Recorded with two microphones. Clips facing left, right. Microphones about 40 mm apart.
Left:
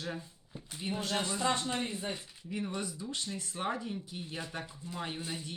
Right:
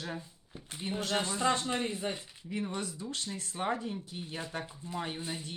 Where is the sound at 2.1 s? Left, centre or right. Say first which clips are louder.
Right 1 dB; centre.